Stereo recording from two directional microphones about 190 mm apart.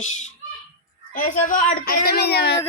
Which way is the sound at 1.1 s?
45° left (ahead or behind).